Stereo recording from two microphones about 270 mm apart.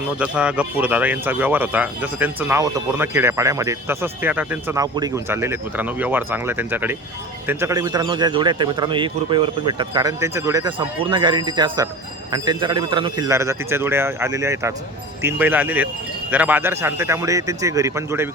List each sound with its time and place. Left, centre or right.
0.2 s speech: centre